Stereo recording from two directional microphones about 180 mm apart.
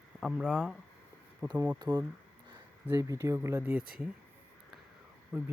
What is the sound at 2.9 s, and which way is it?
Speech, 15° right (ahead or behind).